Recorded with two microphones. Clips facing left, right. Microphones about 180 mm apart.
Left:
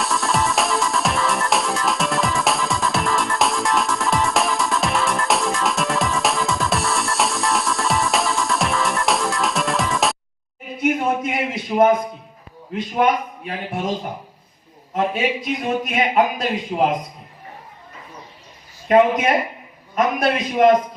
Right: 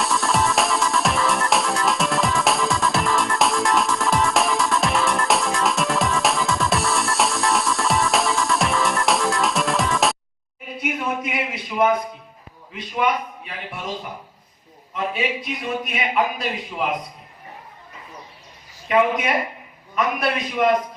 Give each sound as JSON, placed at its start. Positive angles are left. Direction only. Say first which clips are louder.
{"t": 0.0, "sound": "music", "louder": "even", "side_deg": 0}
{"t": 10.8, "sound": "a sound", "louder": "left 6 dB", "side_deg": 50}
{"t": 12.7, "sound": "a man's voice", "louder": "left 4 dB", "side_deg": 50}
{"t": 18.9, "sound": "a man's voice", "louder": "left 4 dB", "side_deg": 45}